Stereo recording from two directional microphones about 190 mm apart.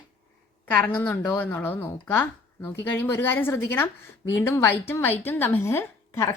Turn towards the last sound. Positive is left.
turn(degrees=15)  # may be behind; listen again after turning